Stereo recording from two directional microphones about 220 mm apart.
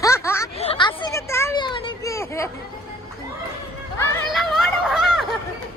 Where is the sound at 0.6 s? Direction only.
25° left (ahead or behind).